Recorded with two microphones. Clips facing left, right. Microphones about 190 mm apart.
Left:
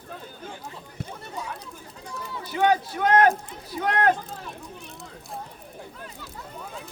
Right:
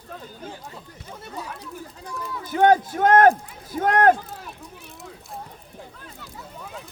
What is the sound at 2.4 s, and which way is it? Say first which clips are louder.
Speech: right 5 dB; 50° right (ahead or behind).